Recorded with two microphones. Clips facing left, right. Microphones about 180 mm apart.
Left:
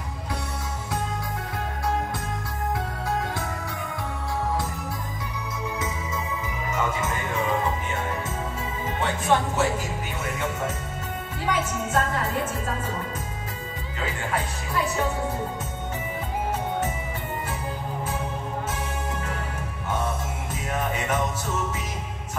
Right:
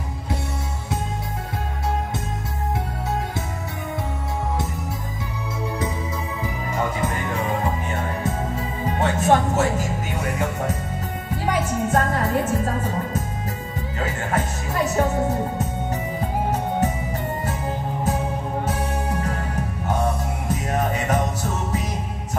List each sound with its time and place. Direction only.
6.7 s music: 35° right (ahead or behind)
9.0 s music: 45° right (ahead or behind)
20.4 s music: 40° right (ahead or behind)